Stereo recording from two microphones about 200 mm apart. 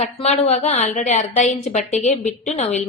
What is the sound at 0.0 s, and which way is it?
A woman's voice, 30° left (ahead or behind).